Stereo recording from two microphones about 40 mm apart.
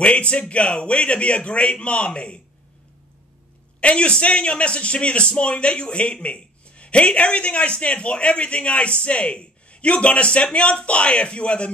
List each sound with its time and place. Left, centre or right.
0.0 s a man's voice: left
3.8 s a man's voice: left